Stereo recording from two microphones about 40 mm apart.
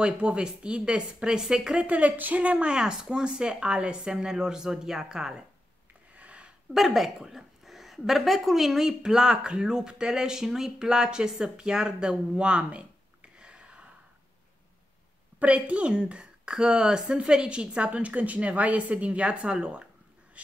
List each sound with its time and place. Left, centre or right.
0.0 s speech: right
1.8 s speech: right
2.6 s speech: right
6.1 s a sound: right
6.7 s speech: centre; by 12.8 s right
13.4 s a sound: right
15.3 s a woman's voice: right
17.9 s speech: right
20.4 s a sound: right